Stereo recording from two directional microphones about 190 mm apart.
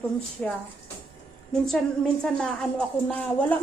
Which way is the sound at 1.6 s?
5° left (ahead or behind).